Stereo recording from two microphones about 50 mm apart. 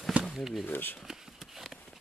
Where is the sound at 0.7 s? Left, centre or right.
Left.